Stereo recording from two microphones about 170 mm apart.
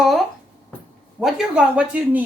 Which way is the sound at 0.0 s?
Centre (ahead or behind).